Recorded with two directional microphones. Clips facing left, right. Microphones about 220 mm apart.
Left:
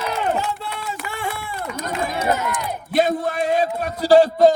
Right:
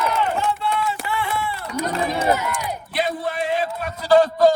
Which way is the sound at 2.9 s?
45° left (ahead or behind).